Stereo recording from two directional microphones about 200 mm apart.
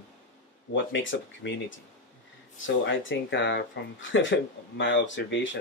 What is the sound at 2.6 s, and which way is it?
Speech, 65° left (ahead or behind).